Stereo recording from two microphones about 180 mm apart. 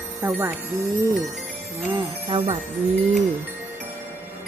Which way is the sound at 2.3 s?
25° right (ahead or behind).